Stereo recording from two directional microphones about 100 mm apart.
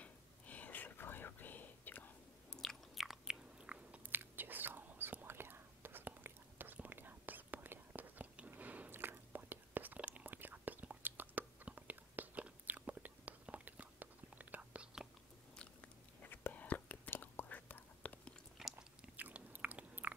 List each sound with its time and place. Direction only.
0.0 s whispering: 15° left (ahead or behind)
2.5 s biting: 5° left (ahead or behind); by 15.0 s 10° right (ahead or behind)
15.5 s biting: 10° left (ahead or behind)
18.6 s biting: 5° right (ahead or behind)
19.1 s biting: 15° right (ahead or behind)